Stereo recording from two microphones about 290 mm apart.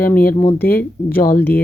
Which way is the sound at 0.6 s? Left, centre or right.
Centre.